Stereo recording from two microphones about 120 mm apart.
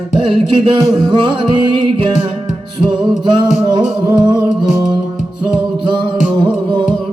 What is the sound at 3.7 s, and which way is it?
Music, 35° right (ahead or behind).